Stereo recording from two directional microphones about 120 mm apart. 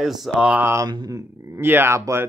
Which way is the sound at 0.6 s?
25° right (ahead or behind).